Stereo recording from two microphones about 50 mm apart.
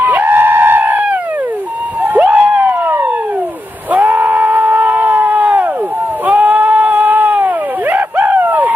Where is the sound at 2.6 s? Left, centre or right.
Right.